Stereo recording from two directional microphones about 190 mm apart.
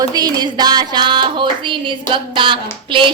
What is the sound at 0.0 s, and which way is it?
A woman's voice, 20° right (ahead or behind).